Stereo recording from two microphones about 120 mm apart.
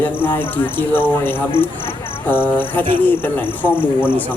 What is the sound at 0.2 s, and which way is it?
Cricket, 15° left (ahead or behind).